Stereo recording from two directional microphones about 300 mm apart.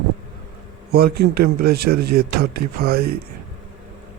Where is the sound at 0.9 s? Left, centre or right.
Right.